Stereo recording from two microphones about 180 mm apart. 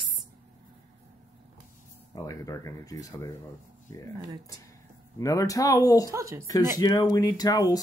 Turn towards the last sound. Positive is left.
turn(degrees=20)  # may be behind; listen again after turning